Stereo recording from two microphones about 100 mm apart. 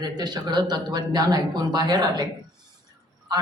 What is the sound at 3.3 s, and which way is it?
Speech, 40° right (ahead or behind).